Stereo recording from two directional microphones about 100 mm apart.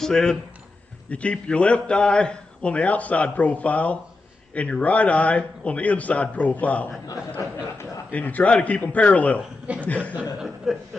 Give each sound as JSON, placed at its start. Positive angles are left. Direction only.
{"t": 0.0, "sound": "a man's voice", "side_deg": 5}
{"t": 7.3, "sound": "a sound", "side_deg": 30}
{"t": 8.1, "sound": "a man's voice", "side_deg": 15}
{"t": 10.3, "sound": "speech", "side_deg": -5}